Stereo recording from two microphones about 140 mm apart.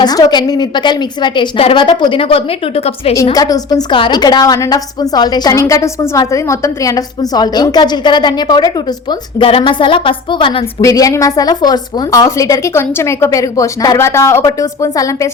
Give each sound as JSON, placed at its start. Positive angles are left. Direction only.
{"t": 0.0, "sound": "a woman's voice", "side_deg": 30}
{"t": 3.3, "sound": "a woman's voice", "side_deg": 25}
{"t": 10.8, "sound": "a woman's voice", "side_deg": 25}